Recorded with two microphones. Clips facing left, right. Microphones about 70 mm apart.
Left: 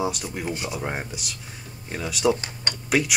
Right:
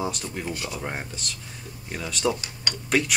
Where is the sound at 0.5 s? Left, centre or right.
Centre.